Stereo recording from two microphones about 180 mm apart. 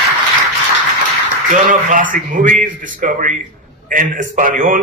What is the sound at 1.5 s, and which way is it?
A man's voice, 45° right (ahead or behind).